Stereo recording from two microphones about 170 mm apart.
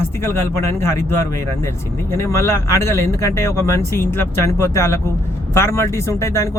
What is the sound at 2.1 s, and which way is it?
Speech, 15° left (ahead or behind).